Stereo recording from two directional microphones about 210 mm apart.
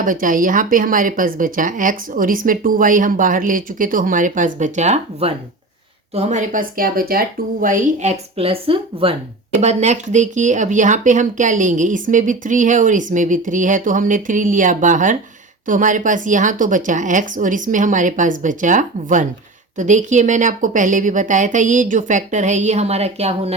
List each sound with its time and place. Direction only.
0.0 s speech: 40° right (ahead or behind)